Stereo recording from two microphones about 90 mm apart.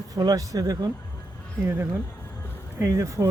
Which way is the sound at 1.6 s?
25° right (ahead or behind).